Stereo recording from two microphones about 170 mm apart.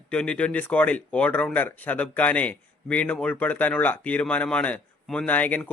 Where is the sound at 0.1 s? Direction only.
5° left (ahead or behind).